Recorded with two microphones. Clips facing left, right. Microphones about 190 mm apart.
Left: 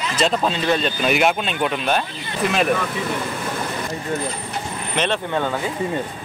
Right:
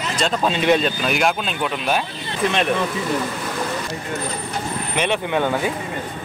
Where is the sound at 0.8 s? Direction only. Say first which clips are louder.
Left 1 dB; centre (ahead or behind).